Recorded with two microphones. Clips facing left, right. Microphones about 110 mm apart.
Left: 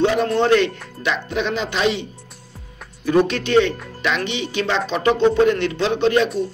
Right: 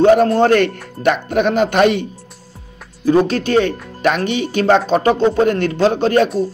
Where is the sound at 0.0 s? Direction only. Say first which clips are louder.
Right 7 dB; 45° right (ahead or behind).